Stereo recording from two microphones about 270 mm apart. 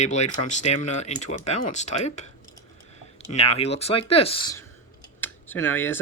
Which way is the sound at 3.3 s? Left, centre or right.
Left.